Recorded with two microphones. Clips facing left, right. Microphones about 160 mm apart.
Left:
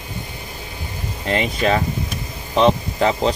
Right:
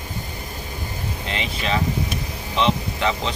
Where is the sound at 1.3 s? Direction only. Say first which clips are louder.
Left 8 dB; 45° left (ahead or behind).